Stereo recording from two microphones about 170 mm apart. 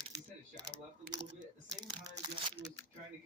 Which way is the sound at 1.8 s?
30° right (ahead or behind).